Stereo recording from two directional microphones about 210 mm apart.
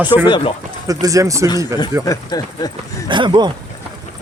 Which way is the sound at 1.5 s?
20° left (ahead or behind).